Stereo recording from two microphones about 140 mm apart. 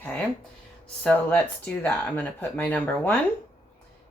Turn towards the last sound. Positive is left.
turn(degrees=15)  # may be behind; listen again after turning